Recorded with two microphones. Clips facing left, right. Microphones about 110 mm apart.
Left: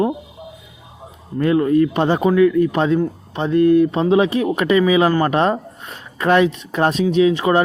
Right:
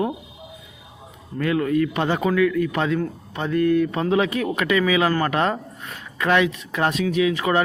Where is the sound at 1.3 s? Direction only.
30° left (ahead or behind).